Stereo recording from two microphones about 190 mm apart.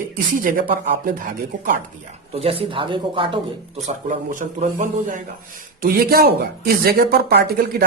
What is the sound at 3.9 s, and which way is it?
Speech, 40° right (ahead or behind).